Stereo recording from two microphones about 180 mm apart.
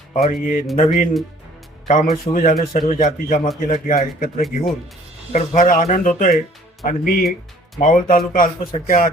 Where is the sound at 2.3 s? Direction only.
50° left (ahead or behind).